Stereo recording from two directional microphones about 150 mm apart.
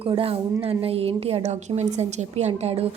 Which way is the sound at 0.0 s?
40° right (ahead or behind).